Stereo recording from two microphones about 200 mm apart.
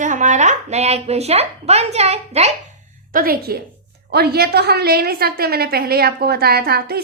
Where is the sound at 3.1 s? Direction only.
45° right (ahead or behind).